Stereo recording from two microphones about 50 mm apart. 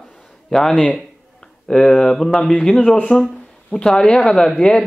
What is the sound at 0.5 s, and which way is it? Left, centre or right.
Speech, centre.